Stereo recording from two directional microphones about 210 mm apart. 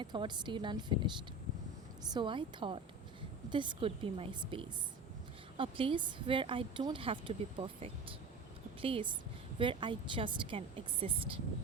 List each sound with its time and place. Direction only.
0.0 s a woman's voice: 20° right (ahead or behind)
2.1 s a woman's voice: 25° right (ahead or behind)